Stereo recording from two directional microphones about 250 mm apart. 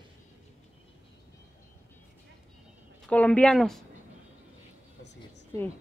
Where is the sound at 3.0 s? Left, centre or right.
Centre.